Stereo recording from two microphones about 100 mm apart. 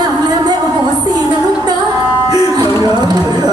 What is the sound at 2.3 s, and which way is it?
Music, 45° right (ahead or behind).